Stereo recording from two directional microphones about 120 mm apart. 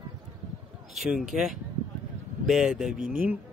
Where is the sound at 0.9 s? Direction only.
5° right (ahead or behind).